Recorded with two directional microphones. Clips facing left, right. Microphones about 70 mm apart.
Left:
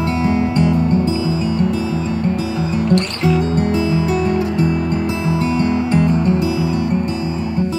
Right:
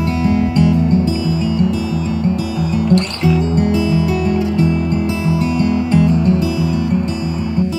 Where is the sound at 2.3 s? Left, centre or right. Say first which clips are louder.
Right 1 dB; left.